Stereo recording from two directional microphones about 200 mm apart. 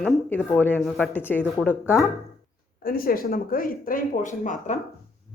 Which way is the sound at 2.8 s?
45° left (ahead or behind).